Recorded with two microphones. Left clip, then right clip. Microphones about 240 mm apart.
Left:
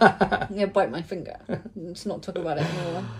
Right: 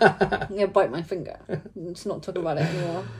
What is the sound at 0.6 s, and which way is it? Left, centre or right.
Speech, centre.